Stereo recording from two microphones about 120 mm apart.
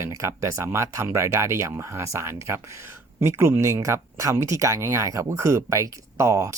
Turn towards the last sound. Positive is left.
turn(degrees=-25)  # may be behind; listen again after turning